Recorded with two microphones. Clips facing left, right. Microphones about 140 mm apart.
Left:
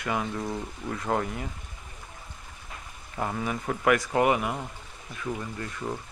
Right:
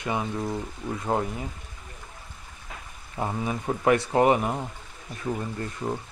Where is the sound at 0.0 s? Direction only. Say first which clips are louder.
Right 1 dB; 20° right (ahead or behind).